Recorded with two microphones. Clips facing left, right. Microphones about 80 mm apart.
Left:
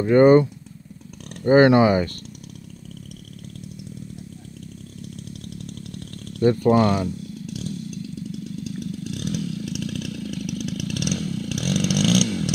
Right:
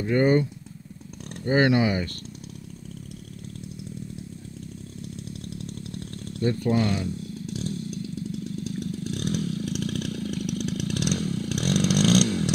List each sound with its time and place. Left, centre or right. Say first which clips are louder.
0.0 s speech: left 8 dB; left
5.3 s chainsaw: even; right
6.4 s speech: left 7 dB; left
7.4 s motorcycle: even; right